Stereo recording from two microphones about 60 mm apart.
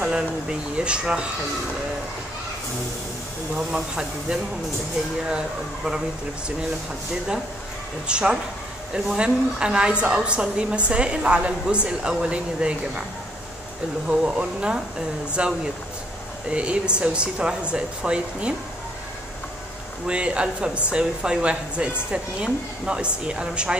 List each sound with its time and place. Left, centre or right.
0.0 s speech: centre
3.5 s a woman's voice: centre
8.1 s a woman's voice: centre
14.0 s a woman's voice: centre
20.1 s a woman's voice: centre